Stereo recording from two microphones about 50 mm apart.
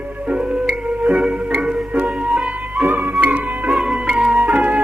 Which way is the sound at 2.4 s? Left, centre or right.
Right.